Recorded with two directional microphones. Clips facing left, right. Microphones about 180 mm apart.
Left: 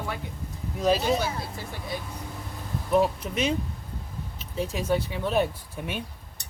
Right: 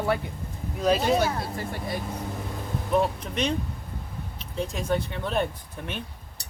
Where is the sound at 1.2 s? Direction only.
60° right (ahead or behind).